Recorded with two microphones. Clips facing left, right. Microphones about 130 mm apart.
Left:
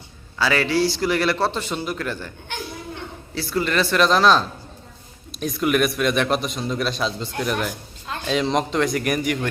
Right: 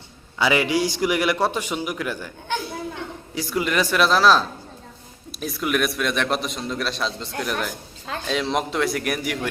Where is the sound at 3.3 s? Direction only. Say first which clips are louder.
Left 1 dB; 15° right (ahead or behind).